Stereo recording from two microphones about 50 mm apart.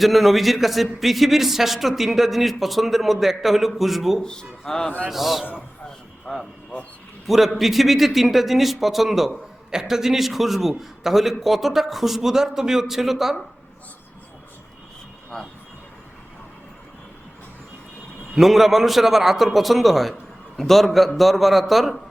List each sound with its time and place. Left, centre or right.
0.0 s a man's voice: centre
4.2 s speech: centre
5.0 s a man's voice: centre
6.3 s speech: centre
7.3 s a man's voice: centre
15.3 s speech: centre
18.3 s a man's voice: centre